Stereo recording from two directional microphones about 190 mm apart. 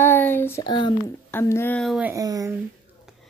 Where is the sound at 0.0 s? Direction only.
10° left (ahead or behind).